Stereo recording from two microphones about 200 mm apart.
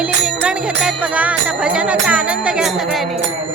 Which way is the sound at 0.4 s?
5° right (ahead or behind).